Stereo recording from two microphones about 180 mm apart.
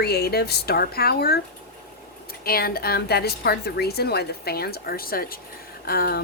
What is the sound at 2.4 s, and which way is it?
A woman's voice, 55° left (ahead or behind).